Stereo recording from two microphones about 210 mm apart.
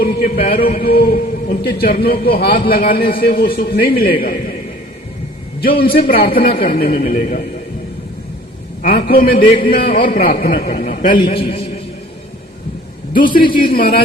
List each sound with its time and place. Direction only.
0.0 s a man's voice: 45° left (ahead or behind)
6.1 s a man's voice: 45° left (ahead or behind)
8.8 s a man's voice: 45° left (ahead or behind)
11.1 s a man's voice: 25° left (ahead or behind)
13.1 s a man's voice: 40° left (ahead or behind)